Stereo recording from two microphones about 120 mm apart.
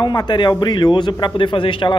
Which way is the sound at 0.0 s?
35° left (ahead or behind).